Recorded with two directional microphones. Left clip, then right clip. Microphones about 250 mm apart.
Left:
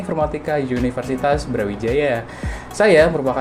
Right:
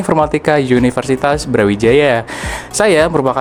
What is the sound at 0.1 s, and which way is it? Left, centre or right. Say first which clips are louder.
Speech: right 8 dB; right.